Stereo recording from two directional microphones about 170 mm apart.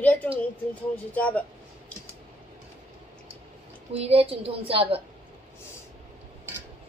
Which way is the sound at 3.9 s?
35° right (ahead or behind).